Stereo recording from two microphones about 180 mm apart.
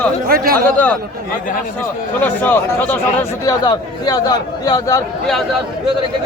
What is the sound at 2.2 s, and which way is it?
A man's voice, 10° left (ahead or behind).